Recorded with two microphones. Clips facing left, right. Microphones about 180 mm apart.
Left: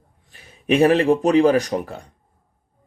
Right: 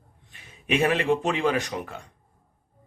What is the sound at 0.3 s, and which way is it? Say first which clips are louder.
Speech: left 7 dB; 35° left (ahead or behind).